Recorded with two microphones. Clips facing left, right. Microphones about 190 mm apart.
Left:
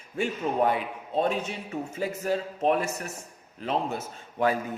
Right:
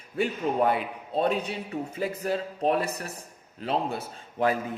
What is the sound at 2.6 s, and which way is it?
A man's voice, 35° right (ahead or behind).